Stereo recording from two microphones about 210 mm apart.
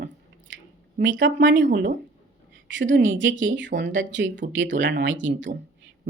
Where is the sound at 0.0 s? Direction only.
60° right (ahead or behind).